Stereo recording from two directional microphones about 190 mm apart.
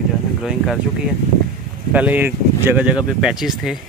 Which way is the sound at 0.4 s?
Centre (ahead or behind).